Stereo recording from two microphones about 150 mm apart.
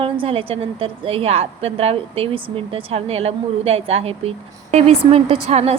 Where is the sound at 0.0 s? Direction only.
40° right (ahead or behind).